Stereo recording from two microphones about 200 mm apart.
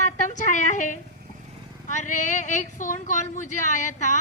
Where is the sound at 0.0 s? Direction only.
40° left (ahead or behind).